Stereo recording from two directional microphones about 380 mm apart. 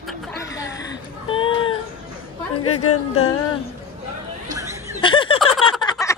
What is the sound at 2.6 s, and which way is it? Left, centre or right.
Speech, left.